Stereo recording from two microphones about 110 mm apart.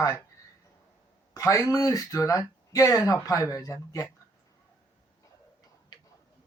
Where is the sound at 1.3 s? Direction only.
30° left (ahead or behind).